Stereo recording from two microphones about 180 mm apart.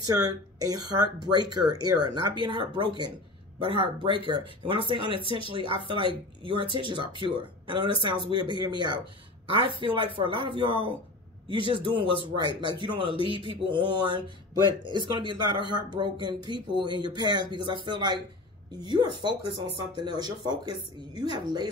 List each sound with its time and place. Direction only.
0.0 s speech: 20° right (ahead or behind)